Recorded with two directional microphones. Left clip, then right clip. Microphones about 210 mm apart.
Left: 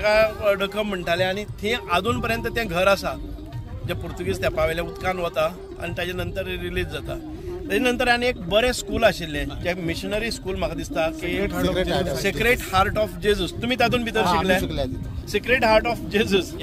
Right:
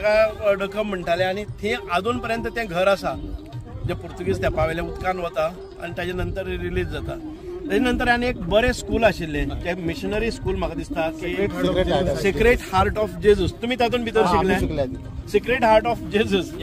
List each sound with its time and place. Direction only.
0.0 s speech: 10° left (ahead or behind)
11.3 s speech: 45° left (ahead or behind)
12.2 s speech: 10° left (ahead or behind)
14.6 s speech: 45° left (ahead or behind)
15.3 s speech: 5° left (ahead or behind)